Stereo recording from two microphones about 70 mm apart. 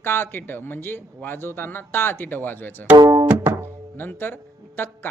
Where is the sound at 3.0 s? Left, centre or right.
Right.